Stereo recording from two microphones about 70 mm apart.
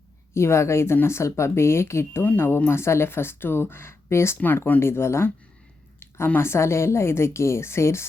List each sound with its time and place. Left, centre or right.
0.3 s a woman's voice: left
4.4 s a woman's voice: left